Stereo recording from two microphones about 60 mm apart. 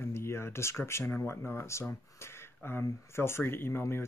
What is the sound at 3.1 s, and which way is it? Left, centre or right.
Speech, left.